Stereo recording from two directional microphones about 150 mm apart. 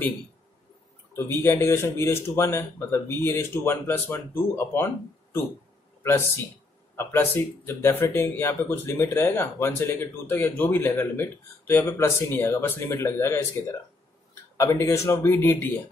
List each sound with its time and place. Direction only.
1.1 s speech: 15° left (ahead or behind)
6.0 s speech: 15° left (ahead or behind)